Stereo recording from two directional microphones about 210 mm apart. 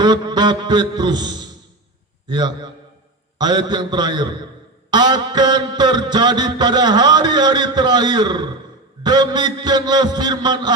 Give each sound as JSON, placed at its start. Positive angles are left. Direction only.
{"t": 0.0, "sound": "music", "side_deg": -20}
{"t": 2.2, "sound": "a man's voice", "side_deg": -20}
{"t": 3.3, "sound": "music", "side_deg": -20}